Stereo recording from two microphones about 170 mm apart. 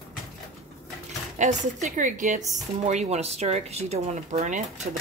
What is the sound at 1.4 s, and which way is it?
A woman's voice, 45° right (ahead or behind).